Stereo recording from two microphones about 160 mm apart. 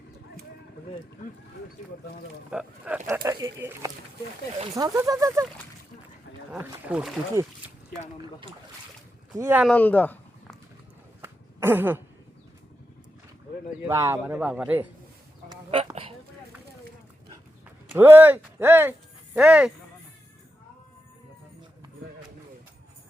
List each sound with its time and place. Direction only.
2.5 s speech: 5° right (ahead or behind)
3.1 s speech: 20° right (ahead or behind)
6.6 s speech: 10° right (ahead or behind)
9.4 s speech: 10° right (ahead or behind)
9.6 s speech: 10° left (ahead or behind)
11.2 s a sound: 15° right (ahead or behind)
13.8 s speech: 20° right (ahead or behind)
15.4 s duck: 35° right (ahead or behind)
17.8 s speech: 15° right (ahead or behind)